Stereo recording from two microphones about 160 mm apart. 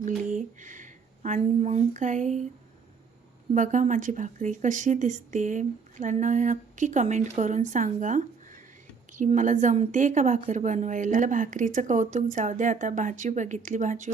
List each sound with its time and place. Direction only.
0.3 s speech: 50° right (ahead or behind)
3.5 s a woman's voice: 50° right (ahead or behind)